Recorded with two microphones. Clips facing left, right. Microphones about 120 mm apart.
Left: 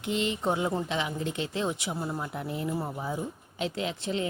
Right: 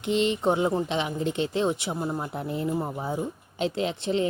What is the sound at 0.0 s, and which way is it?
Speech, 25° right (ahead or behind).